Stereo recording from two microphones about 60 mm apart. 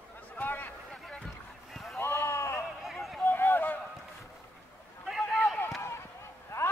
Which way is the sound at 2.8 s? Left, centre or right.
Centre.